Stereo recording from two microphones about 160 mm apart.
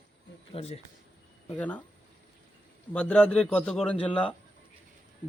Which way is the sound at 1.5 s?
10° left (ahead or behind).